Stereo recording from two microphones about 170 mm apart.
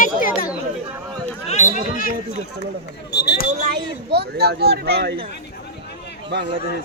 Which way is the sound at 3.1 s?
70° left (ahead or behind).